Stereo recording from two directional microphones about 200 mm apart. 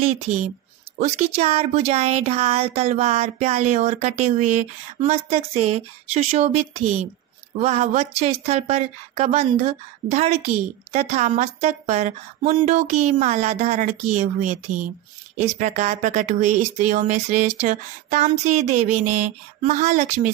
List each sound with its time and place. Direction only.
0.0 s speech: 35° right (ahead or behind)